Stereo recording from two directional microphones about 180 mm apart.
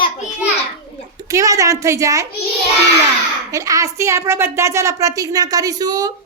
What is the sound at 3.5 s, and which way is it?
A woman's voice, 20° right (ahead or behind).